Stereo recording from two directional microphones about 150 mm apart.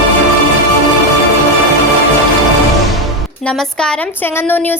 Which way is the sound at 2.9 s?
5° left (ahead or behind).